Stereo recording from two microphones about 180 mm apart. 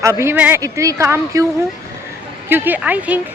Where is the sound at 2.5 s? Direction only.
10° right (ahead or behind).